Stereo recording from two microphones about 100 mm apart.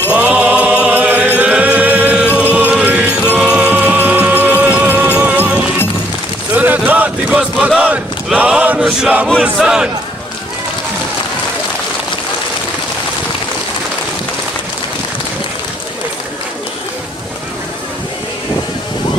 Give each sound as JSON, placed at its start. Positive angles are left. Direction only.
{"t": 0.1, "sound": "mantra", "side_deg": -10}
{"t": 2.7, "sound": "music", "side_deg": -15}
{"t": 6.5, "sound": "a sound", "side_deg": -15}
{"t": 7.6, "sound": "chant", "side_deg": -15}
{"t": 9.4, "sound": "speech", "side_deg": -5}